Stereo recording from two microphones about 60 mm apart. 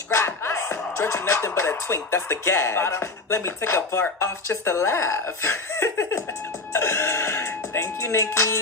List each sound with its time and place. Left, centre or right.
0.1 s music: left
1.9 s speech: left
6.7 s music: left